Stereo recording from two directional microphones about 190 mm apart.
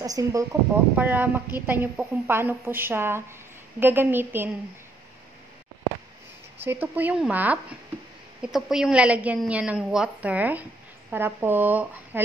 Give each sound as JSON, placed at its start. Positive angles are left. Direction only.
{"t": 0.0, "sound": "a woman's voice", "side_deg": -20}
{"t": 6.6, "sound": "a woman's voice", "side_deg": -10}